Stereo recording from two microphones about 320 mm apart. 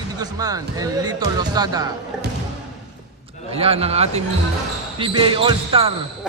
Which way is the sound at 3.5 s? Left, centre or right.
Centre.